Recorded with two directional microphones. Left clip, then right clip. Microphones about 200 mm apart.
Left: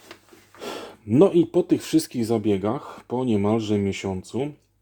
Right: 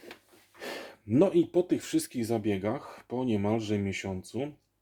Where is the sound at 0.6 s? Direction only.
25° left (ahead or behind).